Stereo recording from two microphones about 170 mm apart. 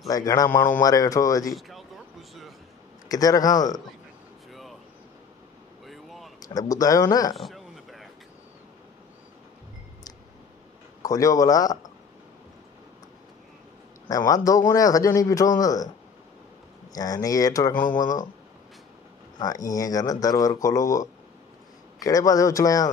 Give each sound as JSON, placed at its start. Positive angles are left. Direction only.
{"t": 0.1, "sound": "speech", "side_deg": 20}
{"t": 1.5, "sound": "speech", "side_deg": 0}
{"t": 3.1, "sound": "speech", "side_deg": 20}
{"t": 4.5, "sound": "vehicle", "side_deg": 0}
{"t": 5.9, "sound": "a sound", "side_deg": 0}
{"t": 6.4, "sound": "speech", "side_deg": 20}
{"t": 7.3, "sound": "a sound", "side_deg": 0}
{"t": 11.0, "sound": "speech", "side_deg": 20}
{"t": 14.0, "sound": "speech", "side_deg": 20}
{"t": 16.9, "sound": "speech", "side_deg": 20}
{"t": 19.3, "sound": "speech", "side_deg": 20}